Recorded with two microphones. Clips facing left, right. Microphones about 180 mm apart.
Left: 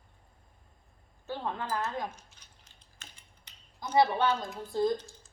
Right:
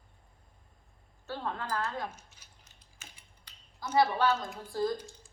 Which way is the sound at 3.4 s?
20° left (ahead or behind).